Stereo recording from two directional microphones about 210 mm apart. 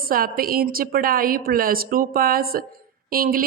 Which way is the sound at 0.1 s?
45° right (ahead or behind).